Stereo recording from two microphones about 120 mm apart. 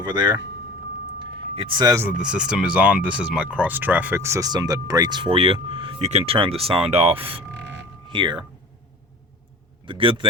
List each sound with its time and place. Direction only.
0.0 s speech: 40° right (ahead or behind)
1.2 s a sound: 50° right (ahead or behind)
1.8 s speech: 30° right (ahead or behind)
2.1 s speech: 5° right (ahead or behind); by 5.9 s 45° right (ahead or behind)
6.0 s speech: 65° right (ahead or behind); by 8.4 s 40° right (ahead or behind)
9.8 s a man's voice: 45° right (ahead or behind)